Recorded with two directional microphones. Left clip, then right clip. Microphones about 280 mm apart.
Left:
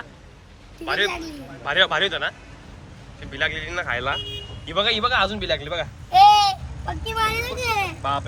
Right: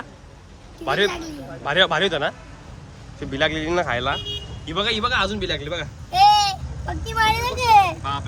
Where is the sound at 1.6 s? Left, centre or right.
Centre.